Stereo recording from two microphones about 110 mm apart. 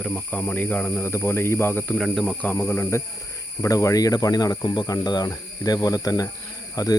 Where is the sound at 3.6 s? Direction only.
30° left (ahead or behind).